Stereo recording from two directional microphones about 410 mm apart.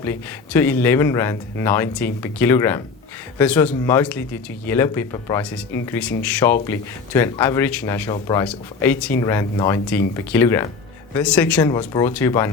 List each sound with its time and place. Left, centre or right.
0.0 s speech: centre